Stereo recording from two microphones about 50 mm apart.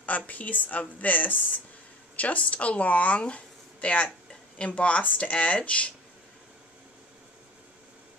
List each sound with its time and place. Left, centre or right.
0.3 s speech: left